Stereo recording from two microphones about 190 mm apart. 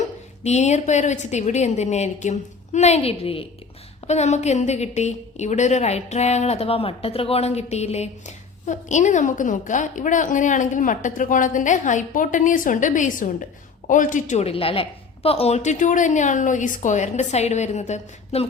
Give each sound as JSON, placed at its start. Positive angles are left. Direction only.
{"t": 0.4, "sound": "a woman's voice", "side_deg": 35}